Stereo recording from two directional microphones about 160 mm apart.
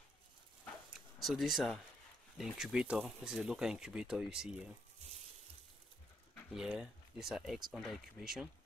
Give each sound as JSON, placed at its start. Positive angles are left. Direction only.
{"t": 1.2, "sound": "speech", "side_deg": 0}
{"t": 6.5, "sound": "speech", "side_deg": -5}